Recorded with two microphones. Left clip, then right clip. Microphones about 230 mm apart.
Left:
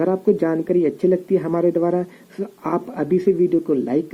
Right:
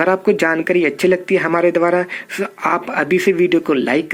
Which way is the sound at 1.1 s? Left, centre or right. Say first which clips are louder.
Right 4 dB; centre.